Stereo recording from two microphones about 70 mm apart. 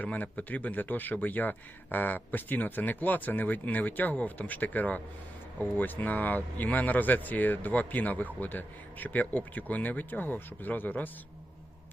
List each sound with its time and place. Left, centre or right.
0.0 s speech: left